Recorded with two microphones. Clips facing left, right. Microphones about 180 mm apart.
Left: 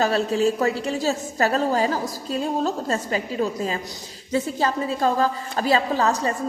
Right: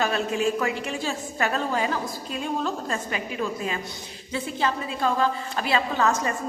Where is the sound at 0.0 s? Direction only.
35° left (ahead or behind).